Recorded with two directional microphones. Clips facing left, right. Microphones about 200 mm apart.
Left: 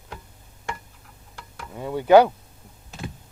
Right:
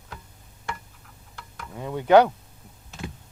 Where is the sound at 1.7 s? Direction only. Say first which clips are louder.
Left 2 dB; 5° left (ahead or behind).